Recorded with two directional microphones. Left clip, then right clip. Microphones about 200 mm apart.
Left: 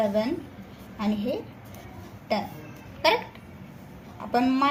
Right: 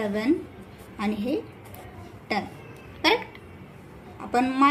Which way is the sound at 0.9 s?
35° right (ahead or behind).